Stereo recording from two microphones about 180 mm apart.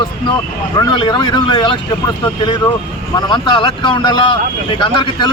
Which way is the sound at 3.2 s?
25° left (ahead or behind).